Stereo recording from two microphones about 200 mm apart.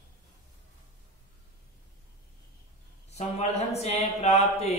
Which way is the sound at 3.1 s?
35° left (ahead or behind).